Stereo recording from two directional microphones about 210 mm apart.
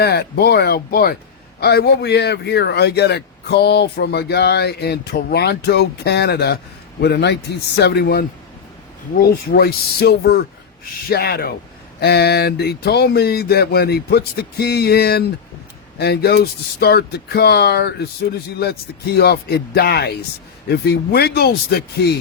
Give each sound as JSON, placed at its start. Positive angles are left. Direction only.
{"t": 0.0, "sound": "a man's voice", "side_deg": 50}
{"t": 9.2, "sound": "a man's voice", "side_deg": 50}